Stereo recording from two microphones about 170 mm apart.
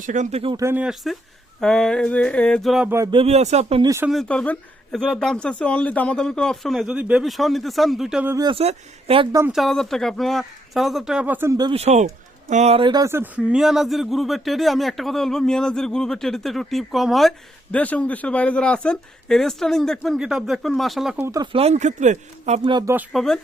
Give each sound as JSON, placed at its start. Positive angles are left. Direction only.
{"t": 0.0, "sound": "speech", "side_deg": -45}
{"t": 0.5, "sound": "speech", "side_deg": -15}
{"t": 3.1, "sound": "speech", "side_deg": -35}
{"t": 3.8, "sound": "speech", "side_deg": -15}
{"t": 4.1, "sound": "speech", "side_deg": 5}
{"t": 8.3, "sound": "speech", "side_deg": -20}
{"t": 8.5, "sound": "speech", "side_deg": -35}
{"t": 9.5, "sound": "speech", "side_deg": 0}
{"t": 11.7, "sound": "speech", "side_deg": -40}
{"t": 13.1, "sound": "speech", "side_deg": -10}
{"t": 21.2, "sound": "speech", "side_deg": -20}
{"t": 21.5, "sound": "speech", "side_deg": -40}
{"t": 23.1, "sound": "speech", "side_deg": 0}